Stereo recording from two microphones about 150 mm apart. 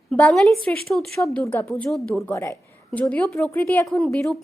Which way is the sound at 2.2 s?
20° left (ahead or behind).